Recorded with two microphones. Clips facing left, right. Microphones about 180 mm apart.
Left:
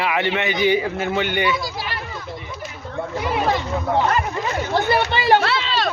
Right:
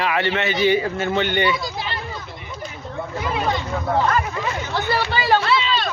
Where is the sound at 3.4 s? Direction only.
10° left (ahead or behind).